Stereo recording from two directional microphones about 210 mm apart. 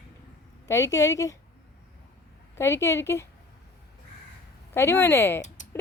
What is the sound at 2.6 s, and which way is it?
Speech, 10° left (ahead or behind).